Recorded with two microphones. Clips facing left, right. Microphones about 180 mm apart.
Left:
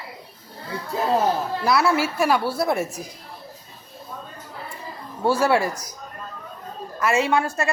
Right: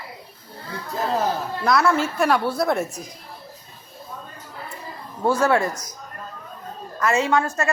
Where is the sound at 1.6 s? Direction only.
5° left (ahead or behind).